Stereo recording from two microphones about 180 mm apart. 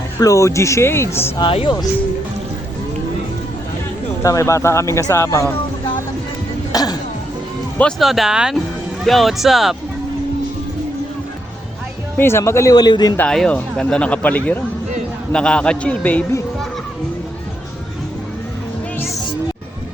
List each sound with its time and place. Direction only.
0.2 s speech: 20° left (ahead or behind)
1.4 s speech: 30° left (ahead or behind)
4.2 s speech: 15° left (ahead or behind)
6.7 s music: 20° left (ahead or behind)
7.8 s a man's voice: centre (ahead or behind)
12.1 s speech: 15° left (ahead or behind)
13.1 s a man's voice: 5° left (ahead or behind)